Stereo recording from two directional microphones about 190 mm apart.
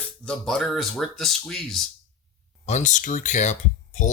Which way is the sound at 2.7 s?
40° left (ahead or behind).